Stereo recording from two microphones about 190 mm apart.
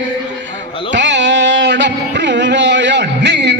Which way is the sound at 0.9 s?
70° right (ahead or behind).